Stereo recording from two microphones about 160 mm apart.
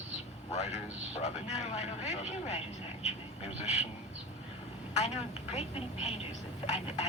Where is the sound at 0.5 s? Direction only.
45° left (ahead or behind).